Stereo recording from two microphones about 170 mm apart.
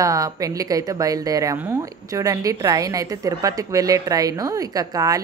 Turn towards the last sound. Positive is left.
turn(degrees=-20)  # may be behind; listen again after turning